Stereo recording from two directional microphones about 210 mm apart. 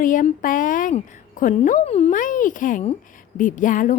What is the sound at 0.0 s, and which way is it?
Speech, 40° left (ahead or behind).